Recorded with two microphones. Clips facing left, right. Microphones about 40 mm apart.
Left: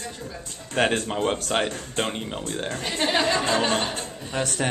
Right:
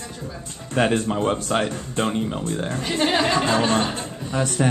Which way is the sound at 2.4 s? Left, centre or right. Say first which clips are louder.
Right 3 dB; left.